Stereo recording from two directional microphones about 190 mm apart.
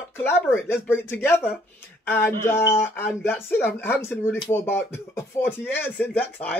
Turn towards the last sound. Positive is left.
turn(degrees=5)  # may be behind; listen again after turning